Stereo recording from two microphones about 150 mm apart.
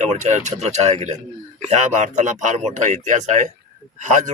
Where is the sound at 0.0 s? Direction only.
50° right (ahead or behind).